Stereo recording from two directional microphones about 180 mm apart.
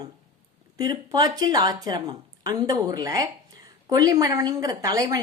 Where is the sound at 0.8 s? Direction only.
20° right (ahead or behind).